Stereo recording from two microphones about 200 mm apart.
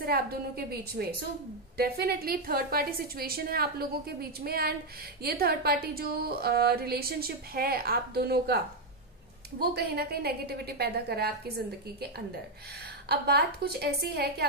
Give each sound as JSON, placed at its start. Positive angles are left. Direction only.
{"t": 0.0, "sound": "a woman's voice", "side_deg": -50}
{"t": 13.1, "sound": "a woman's voice", "side_deg": -55}